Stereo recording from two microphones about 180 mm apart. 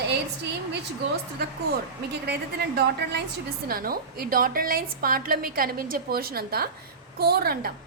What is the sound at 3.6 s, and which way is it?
A woman's voice, 55° right (ahead or behind).